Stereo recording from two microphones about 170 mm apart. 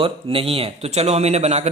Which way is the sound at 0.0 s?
35° right (ahead or behind).